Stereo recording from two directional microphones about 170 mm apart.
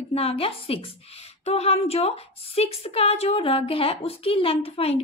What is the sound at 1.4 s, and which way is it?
Speech, 35° left (ahead or behind).